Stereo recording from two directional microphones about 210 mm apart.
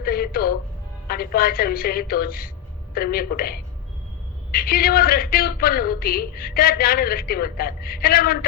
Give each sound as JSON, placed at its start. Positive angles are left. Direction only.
{"t": 0.0, "sound": "music", "side_deg": 45}
{"t": 1.0, "sound": "a woman's voice", "side_deg": 45}